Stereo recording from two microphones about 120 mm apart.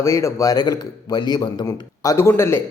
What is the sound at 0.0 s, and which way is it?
A man's voice, 25° left (ahead or behind).